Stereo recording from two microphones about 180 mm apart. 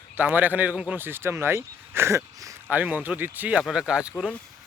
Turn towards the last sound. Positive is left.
turn(degrees=-5)  # may be behind; listen again after turning